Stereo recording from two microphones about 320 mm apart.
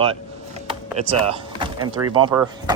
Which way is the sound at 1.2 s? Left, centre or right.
Centre.